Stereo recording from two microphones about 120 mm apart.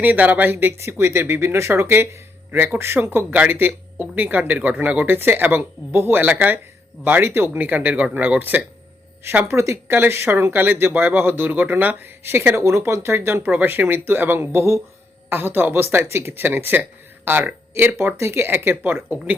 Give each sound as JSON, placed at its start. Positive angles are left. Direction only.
{"t": 0.0, "sound": "speech", "side_deg": -15}